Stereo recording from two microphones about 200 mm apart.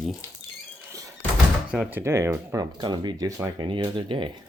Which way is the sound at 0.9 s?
15° right (ahead or behind).